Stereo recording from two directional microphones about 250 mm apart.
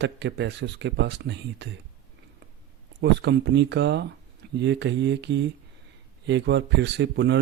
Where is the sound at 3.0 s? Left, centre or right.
Right.